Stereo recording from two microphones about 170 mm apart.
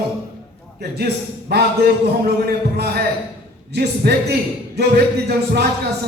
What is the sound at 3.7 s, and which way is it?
A man's voice, 75° right (ahead or behind).